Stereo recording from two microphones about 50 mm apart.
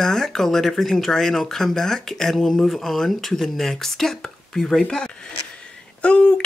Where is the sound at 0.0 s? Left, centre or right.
Centre.